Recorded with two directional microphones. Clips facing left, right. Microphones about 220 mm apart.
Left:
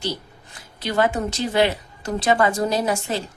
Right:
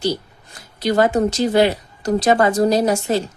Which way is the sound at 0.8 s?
40° right (ahead or behind).